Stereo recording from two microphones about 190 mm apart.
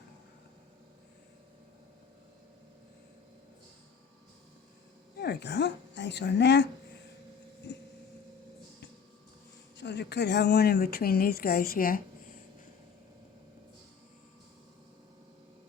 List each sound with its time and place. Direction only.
5.1 s a woman's voice: 60° left (ahead or behind)
9.7 s speech: 65° left (ahead or behind); by 12.0 s 50° left (ahead or behind)